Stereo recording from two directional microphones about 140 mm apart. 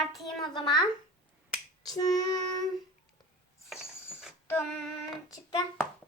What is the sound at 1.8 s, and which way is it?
Child singing, 25° left (ahead or behind).